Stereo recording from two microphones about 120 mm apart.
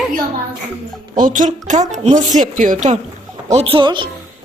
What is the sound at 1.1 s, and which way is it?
A woman's voice, 90° right.